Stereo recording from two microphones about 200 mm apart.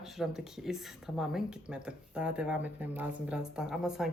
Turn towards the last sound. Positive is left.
turn(degrees=0)  # may be behind; listen again after turning